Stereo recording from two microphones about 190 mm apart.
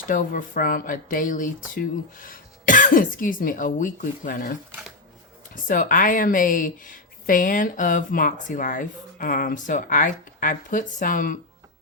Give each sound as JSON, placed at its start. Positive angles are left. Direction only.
{"t": 0.1, "sound": "speech", "side_deg": 45}
{"t": 5.6, "sound": "speech", "side_deg": 45}